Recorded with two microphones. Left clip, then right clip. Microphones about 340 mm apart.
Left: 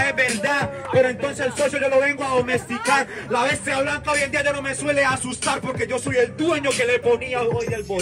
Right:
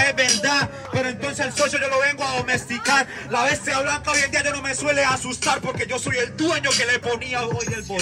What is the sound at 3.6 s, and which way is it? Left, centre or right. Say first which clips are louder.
Speech: even; centre.